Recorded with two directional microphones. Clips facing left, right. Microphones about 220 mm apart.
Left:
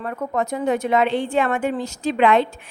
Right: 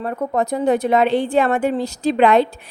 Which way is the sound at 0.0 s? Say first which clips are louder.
Right 3 dB; 35° right (ahead or behind).